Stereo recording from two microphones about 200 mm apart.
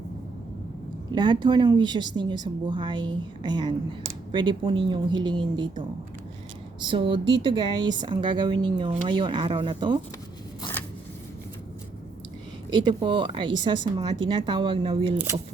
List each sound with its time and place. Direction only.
1.1 s speech: 20° right (ahead or behind)
6.9 s speech: 25° right (ahead or behind)
10.6 s a sound: 10° left (ahead or behind)
12.7 s speech: 25° right (ahead or behind)